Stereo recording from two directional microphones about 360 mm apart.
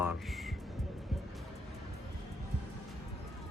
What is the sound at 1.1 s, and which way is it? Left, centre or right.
Music, centre.